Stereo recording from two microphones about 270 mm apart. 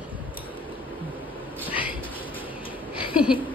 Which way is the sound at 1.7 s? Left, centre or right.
Centre.